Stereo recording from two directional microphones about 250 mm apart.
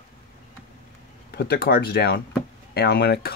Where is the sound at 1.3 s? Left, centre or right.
Left.